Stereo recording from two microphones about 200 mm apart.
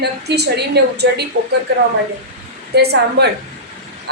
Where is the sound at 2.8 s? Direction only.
55° right (ahead or behind).